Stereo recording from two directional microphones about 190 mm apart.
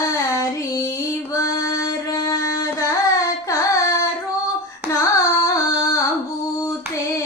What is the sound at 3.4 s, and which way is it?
Carnatic music, 15° left (ahead or behind).